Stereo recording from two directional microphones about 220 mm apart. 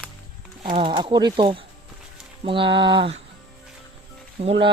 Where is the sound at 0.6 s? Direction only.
25° right (ahead or behind).